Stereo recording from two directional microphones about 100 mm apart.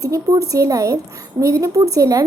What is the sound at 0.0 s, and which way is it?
A child's voice, 35° right (ahead or behind).